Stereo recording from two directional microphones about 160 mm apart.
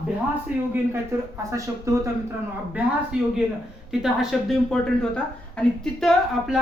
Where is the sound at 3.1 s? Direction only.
5° right (ahead or behind).